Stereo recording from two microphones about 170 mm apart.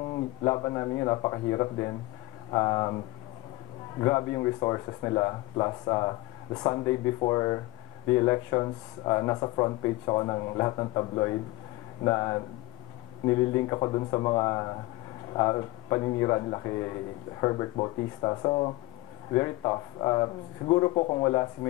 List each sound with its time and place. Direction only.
0.1 s speech: 25° left (ahead or behind)
4.0 s speech: 25° left (ahead or behind)